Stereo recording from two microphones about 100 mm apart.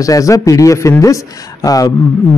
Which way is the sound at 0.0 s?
35° left (ahead or behind).